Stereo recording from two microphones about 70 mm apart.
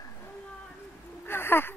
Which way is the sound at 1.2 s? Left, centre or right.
Left.